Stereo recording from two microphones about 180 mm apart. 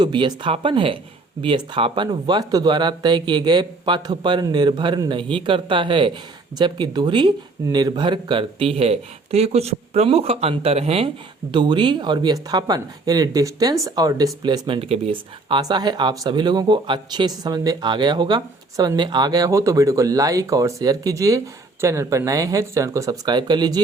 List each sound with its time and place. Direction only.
0.0 s speech: 25° right (ahead or behind)